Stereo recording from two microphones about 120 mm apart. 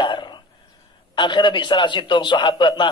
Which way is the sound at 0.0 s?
40° left (ahead or behind).